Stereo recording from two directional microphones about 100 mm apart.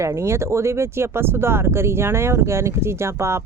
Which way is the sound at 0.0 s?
30° right (ahead or behind).